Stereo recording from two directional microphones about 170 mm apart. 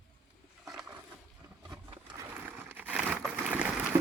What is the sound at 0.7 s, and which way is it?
Wild animals, 5° right (ahead or behind).